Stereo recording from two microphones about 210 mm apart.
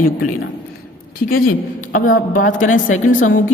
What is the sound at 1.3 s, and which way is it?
Speech, 40° left (ahead or behind).